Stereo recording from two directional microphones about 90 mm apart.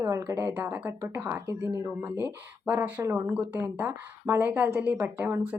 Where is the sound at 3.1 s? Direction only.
25° right (ahead or behind).